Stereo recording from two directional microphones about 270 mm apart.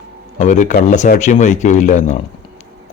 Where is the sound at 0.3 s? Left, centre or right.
Left.